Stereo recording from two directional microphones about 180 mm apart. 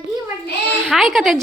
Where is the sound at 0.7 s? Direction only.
Centre (ahead or behind).